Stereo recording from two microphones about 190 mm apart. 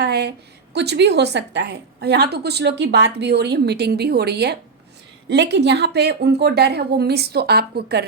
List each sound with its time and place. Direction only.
0.0 s a woman's voice: 60° right (ahead or behind)